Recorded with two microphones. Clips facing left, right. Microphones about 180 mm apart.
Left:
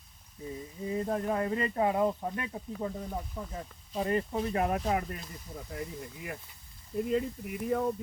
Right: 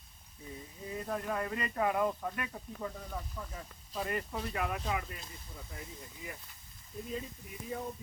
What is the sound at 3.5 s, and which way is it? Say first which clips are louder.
Speech: left 6 dB; 35° left (ahead or behind).